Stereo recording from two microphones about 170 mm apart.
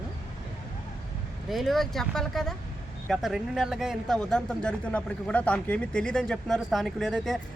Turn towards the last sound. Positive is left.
turn(degrees=0)  # may be behind; listen again after turning